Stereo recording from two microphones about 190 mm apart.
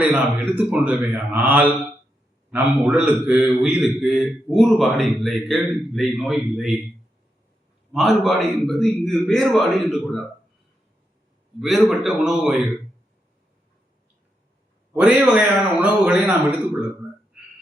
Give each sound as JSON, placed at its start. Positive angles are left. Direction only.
{"t": 0.0, "sound": "a man's voice", "side_deg": -5}
{"t": 7.9, "sound": "a man's voice", "side_deg": 0}
{"t": 11.6, "sound": "a man's voice", "side_deg": 0}
{"t": 14.9, "sound": "a man's voice", "side_deg": -5}